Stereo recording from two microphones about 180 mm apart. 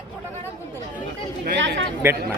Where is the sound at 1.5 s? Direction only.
90° right.